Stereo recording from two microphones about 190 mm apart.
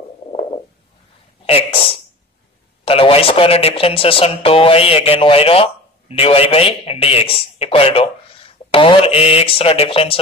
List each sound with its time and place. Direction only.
0.3 s stomach rumble: 30° left (ahead or behind)
1.4 s a woman's voice: 30° left (ahead or behind)